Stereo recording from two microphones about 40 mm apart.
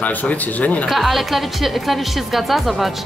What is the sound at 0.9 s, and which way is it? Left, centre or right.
A woman's voice, centre.